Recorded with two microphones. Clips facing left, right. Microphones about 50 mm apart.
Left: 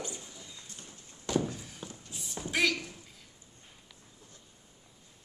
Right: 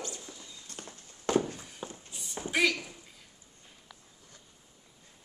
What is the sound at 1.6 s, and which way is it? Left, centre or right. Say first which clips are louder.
Walk: right 3 dB; centre.